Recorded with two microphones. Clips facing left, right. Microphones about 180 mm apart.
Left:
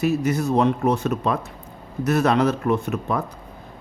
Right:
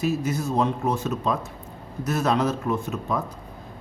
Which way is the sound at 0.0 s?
65° left (ahead or behind).